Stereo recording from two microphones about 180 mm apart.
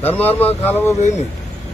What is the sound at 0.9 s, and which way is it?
Speech, 40° left (ahead or behind).